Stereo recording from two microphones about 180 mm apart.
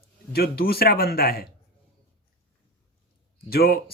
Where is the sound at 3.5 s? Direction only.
55° left (ahead or behind).